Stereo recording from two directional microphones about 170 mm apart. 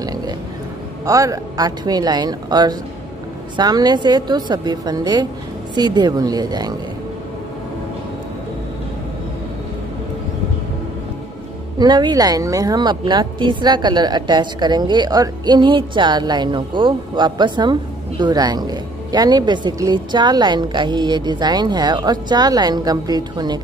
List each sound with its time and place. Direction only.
1.0 s a woman's voice: 20° right (ahead or behind)
11.8 s a woman's voice: 25° right (ahead or behind)